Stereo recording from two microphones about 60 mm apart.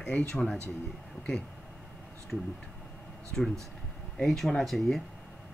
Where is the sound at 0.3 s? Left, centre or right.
Centre.